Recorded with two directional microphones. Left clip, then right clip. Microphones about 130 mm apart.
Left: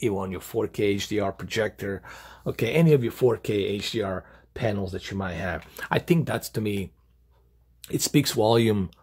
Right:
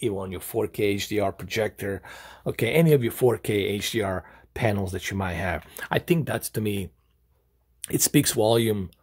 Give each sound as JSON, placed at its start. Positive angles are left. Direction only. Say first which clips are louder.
{"t": 0.0, "sound": "speech", "louder": "left 1 dB", "side_deg": 0}
{"t": 0.4, "sound": "speech", "louder": "right 1 dB", "side_deg": -20}
{"t": 0.7, "sound": "speech", "louder": "left 2 dB", "side_deg": -5}
{"t": 5.8, "sound": "speech", "louder": "left 1 dB", "side_deg": -10}
{"t": 7.8, "sound": "speech", "louder": "right 2 dB", "side_deg": -40}
{"t": 8.1, "sound": "speech", "louder": "even", "side_deg": -20}
{"t": 8.4, "sound": "speech", "louder": "left 1 dB", "side_deg": 0}
{"t": 8.6, "sound": "speech", "louder": "left 2 dB", "side_deg": 15}